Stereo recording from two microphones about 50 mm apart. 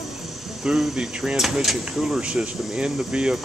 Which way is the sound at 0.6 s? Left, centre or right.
Centre.